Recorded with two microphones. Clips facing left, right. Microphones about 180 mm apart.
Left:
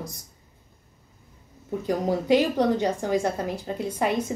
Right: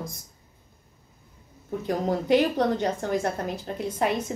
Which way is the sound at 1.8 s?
10° left (ahead or behind).